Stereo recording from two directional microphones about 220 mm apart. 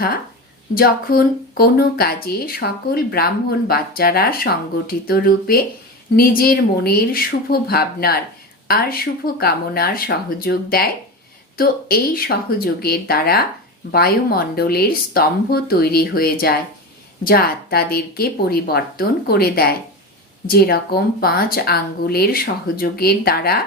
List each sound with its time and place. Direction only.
0.7 s speech: 40° left (ahead or behind)